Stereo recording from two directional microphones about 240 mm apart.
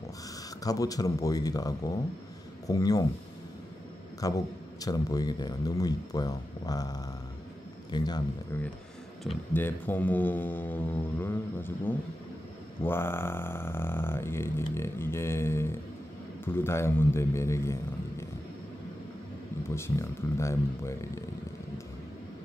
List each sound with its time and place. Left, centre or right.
0.7 s speech: centre
4.2 s a man's voice: centre
19.7 s speech: centre